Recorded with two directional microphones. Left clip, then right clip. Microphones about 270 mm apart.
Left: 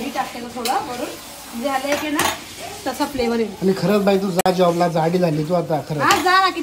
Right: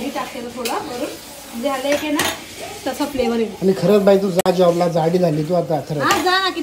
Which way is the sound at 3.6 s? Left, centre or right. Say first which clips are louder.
Right 5 dB; left.